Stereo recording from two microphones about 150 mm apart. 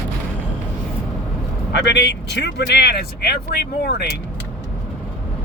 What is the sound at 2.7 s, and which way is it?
Speech, 90° left.